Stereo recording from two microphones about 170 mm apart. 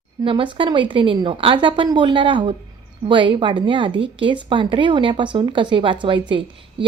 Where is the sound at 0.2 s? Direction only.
30° right (ahead or behind).